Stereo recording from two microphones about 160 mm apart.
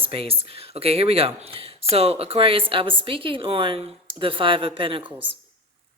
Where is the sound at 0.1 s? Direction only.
35° right (ahead or behind).